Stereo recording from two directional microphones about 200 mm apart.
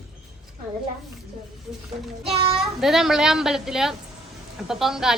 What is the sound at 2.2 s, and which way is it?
Speech, 30° right (ahead or behind).